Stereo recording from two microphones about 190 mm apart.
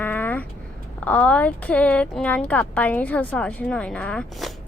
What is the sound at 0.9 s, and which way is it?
A woman's voice, 10° left (ahead or behind).